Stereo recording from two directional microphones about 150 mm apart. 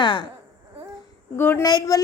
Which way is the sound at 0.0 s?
30° left (ahead or behind).